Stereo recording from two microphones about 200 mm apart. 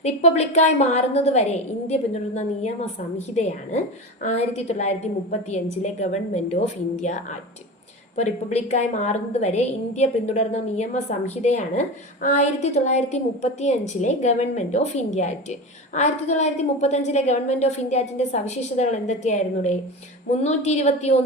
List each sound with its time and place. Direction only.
0.0 s a woman's voice: 35° left (ahead or behind)